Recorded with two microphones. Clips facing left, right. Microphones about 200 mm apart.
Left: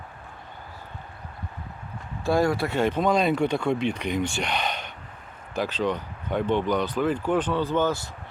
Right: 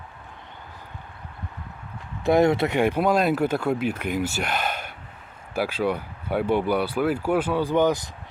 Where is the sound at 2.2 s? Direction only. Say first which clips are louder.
Right 4 dB; 20° right (ahead or behind).